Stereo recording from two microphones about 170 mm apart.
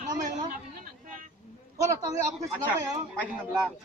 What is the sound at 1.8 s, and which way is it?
Speech, 20° right (ahead or behind).